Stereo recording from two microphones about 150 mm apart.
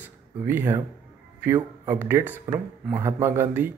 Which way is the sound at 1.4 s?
15° right (ahead or behind).